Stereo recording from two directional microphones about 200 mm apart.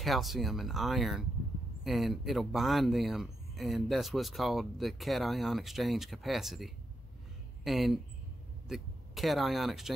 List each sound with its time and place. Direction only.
0.0 s speech: centre (ahead or behind)